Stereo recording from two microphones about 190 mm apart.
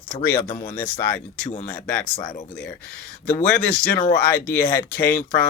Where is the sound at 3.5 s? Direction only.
5° left (ahead or behind).